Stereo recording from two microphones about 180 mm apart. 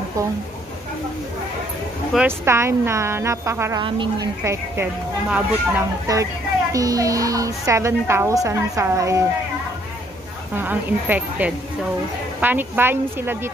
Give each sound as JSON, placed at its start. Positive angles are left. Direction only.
{"t": 2.1, "sound": "a woman's voice", "side_deg": -15}
{"t": 3.8, "sound": "speech", "side_deg": -30}
{"t": 5.3, "sound": "a woman's voice", "side_deg": -15}
{"t": 10.5, "sound": "a woman's voice", "side_deg": -10}